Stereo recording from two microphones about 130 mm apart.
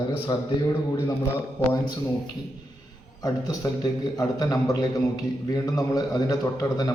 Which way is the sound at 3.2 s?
30° left (ahead or behind).